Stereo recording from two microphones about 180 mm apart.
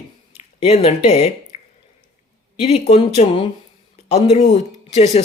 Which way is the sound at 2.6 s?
35° left (ahead or behind).